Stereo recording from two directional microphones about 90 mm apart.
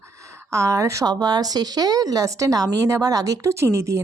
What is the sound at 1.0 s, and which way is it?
A woman's voice, 50° right (ahead or behind).